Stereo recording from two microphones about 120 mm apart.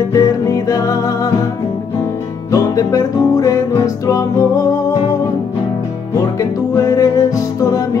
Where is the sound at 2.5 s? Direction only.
25° left (ahead or behind).